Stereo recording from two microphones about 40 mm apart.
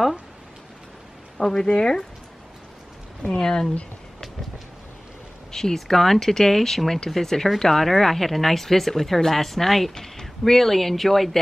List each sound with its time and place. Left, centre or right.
1.4 s speech: centre
3.3 s speech: centre
5.5 s speech: centre